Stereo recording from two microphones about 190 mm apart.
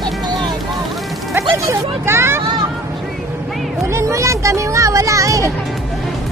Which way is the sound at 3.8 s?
15° right (ahead or behind).